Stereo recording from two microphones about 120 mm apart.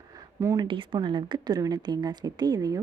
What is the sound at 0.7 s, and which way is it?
A woman's voice, 40° right (ahead or behind).